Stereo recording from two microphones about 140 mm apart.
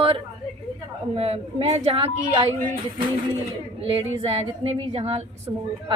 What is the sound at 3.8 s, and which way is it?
A woman's voice, 40° right (ahead or behind).